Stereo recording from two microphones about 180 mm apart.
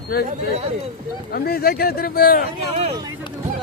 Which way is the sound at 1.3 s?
60° left (ahead or behind).